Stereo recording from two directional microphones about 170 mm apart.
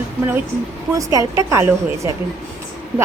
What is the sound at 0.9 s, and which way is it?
A woman's voice, 20° right (ahead or behind).